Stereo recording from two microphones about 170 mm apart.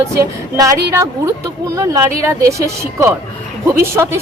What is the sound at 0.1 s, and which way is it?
Speech, 20° right (ahead or behind).